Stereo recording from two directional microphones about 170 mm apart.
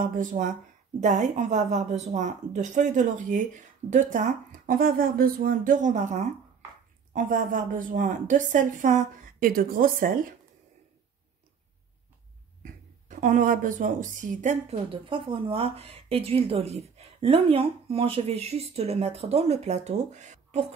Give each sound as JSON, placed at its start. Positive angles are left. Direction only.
{"t": 0.0, "sound": "a woman's voice", "side_deg": -50}
{"t": 13.2, "sound": "speech", "side_deg": -50}